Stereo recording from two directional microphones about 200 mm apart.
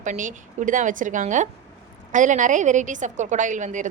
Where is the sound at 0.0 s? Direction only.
40° right (ahead or behind).